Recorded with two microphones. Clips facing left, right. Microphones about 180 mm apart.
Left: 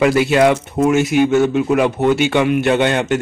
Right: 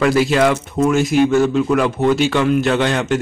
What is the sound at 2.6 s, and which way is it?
Speech, 60° left (ahead or behind).